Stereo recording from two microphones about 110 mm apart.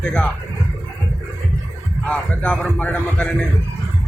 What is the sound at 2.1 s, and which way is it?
A man's voice, 10° left (ahead or behind).